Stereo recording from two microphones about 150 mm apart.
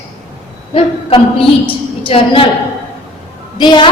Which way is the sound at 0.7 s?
40° left (ahead or behind).